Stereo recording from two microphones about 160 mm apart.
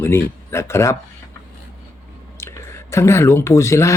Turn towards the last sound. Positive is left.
turn(degrees=20)  # may be behind; listen again after turning